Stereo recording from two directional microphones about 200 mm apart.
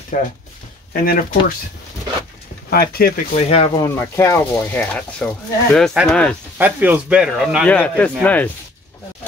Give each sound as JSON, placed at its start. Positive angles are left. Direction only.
{"t": 0.1, "sound": "speech", "side_deg": 40}
{"t": 2.7, "sound": "speech", "side_deg": 50}
{"t": 3.3, "sound": "speech", "side_deg": 30}
{"t": 3.8, "sound": "speech", "side_deg": 15}
{"t": 6.6, "sound": "a man's voice", "side_deg": -10}